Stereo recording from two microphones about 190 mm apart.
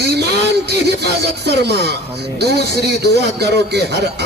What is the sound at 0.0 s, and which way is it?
Speech, 60° right (ahead or behind).